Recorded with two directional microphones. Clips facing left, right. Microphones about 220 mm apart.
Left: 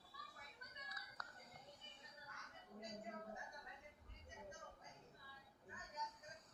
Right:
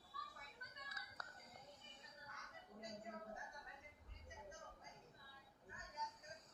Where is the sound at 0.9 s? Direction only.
25° right (ahead or behind).